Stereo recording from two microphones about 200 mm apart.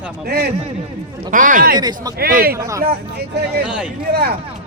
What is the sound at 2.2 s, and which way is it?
Speech, 50° right (ahead or behind).